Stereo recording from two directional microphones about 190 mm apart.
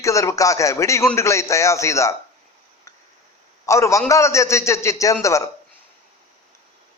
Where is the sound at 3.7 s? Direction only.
15° left (ahead or behind).